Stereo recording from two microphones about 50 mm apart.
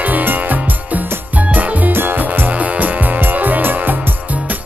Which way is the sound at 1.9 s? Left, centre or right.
Right.